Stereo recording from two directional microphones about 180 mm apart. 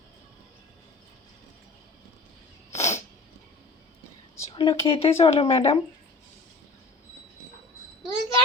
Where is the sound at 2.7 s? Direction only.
40° left (ahead or behind).